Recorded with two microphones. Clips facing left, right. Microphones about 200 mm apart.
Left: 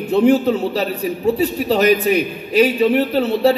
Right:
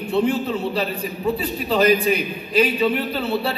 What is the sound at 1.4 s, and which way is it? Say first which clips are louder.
Speech: left 2 dB; 80° left.